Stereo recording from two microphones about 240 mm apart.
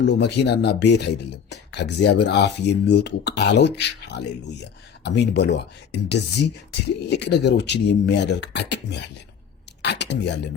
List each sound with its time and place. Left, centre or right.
0.0 s speech: left